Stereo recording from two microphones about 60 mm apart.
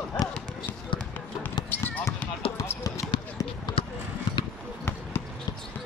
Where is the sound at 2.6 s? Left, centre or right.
Left.